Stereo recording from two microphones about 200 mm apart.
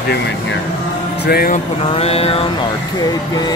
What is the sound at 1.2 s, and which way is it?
Speech, 50° left (ahead or behind).